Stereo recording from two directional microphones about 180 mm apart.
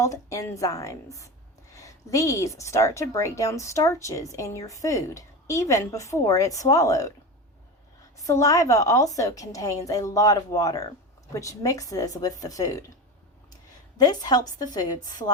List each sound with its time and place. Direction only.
0.0 s a woman's voice: 15° left (ahead or behind)
8.3 s a woman's voice: 20° left (ahead or behind)
14.0 s a woman's voice: 20° left (ahead or behind)